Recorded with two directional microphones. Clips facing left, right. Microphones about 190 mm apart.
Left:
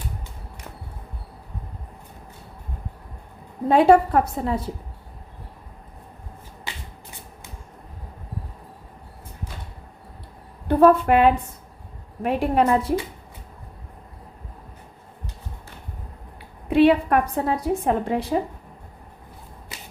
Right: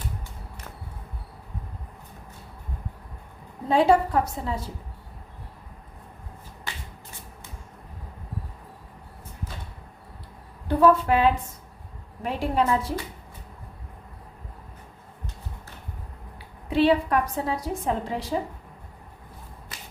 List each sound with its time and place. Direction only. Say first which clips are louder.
3.7 s a woman's voice: left 4 dB; 55° left (ahead or behind)
10.7 s a woman's voice: left 4 dB; 55° left (ahead or behind)
16.6 s a woman's voice: left 4 dB; 55° left (ahead or behind)